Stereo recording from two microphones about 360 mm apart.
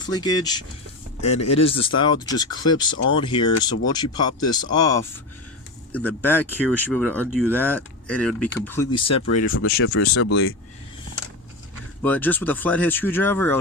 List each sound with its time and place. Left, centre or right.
0.0 s speech: centre
9.2 s speech: left
12.0 s speech: centre